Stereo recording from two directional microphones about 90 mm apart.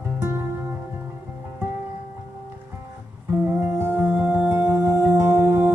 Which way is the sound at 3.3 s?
20° right (ahead or behind).